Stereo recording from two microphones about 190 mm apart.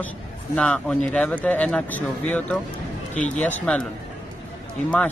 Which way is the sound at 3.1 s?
40° left (ahead or behind).